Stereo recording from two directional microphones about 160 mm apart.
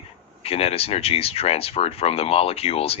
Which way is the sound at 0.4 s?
40° left (ahead or behind).